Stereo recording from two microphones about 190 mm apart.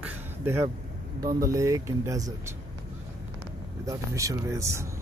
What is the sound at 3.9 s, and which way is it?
Speech, 15° right (ahead or behind).